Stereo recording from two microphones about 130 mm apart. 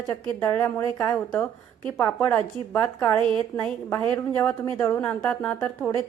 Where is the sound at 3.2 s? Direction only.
40° right (ahead or behind).